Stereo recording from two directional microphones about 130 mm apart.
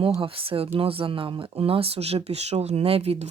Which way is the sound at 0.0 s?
45° right (ahead or behind).